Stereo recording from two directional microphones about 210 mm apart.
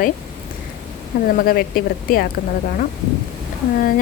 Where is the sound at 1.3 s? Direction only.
45° left (ahead or behind).